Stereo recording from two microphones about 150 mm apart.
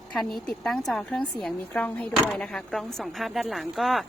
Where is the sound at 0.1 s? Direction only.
Centre (ahead or behind).